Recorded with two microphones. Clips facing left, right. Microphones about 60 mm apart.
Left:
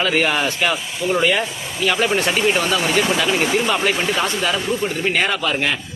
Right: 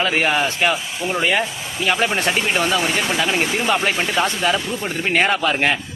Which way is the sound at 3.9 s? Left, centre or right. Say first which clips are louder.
Even; centre.